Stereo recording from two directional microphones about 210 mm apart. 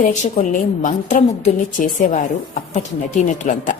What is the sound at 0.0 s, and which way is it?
A woman's voice, 40° left (ahead or behind).